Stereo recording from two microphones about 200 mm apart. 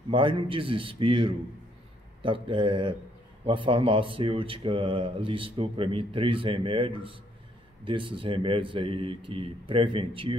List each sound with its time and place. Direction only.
0.1 s speech: 25° right (ahead or behind)